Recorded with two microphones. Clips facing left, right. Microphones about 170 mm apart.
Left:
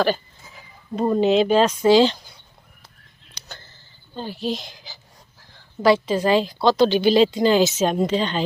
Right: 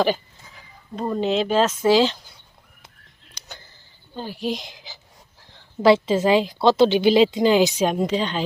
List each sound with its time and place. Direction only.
1.2 s speech: centre (ahead or behind)
3.3 s tick: 15° right (ahead or behind)
4.1 s a woman's voice: 10° right (ahead or behind)